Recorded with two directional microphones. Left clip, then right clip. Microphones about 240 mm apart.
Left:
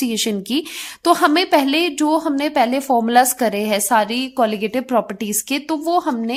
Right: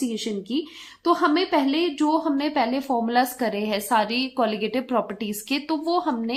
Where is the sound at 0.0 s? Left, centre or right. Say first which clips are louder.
Left 7 dB; left.